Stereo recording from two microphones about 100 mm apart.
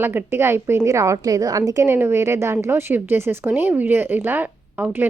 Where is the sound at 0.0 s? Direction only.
20° right (ahead or behind).